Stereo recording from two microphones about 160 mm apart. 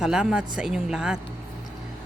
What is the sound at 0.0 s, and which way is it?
Speech, 5° right (ahead or behind).